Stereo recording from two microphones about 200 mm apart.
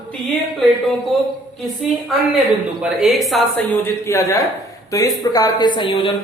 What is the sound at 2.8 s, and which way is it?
A woman's voice, centre (ahead or behind).